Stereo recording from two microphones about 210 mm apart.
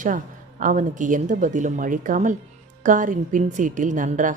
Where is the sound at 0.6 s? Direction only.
35° right (ahead or behind).